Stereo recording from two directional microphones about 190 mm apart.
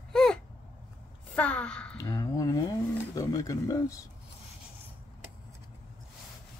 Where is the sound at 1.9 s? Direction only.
15° left (ahead or behind).